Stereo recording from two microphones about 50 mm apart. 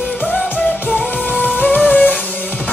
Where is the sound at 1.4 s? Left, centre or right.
Left.